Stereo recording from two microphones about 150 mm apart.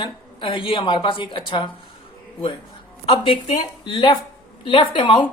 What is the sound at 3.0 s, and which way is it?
A woman's voice, 35° left (ahead or behind).